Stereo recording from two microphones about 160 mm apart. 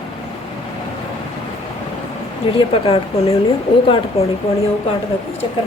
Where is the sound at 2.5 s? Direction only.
35° left (ahead or behind).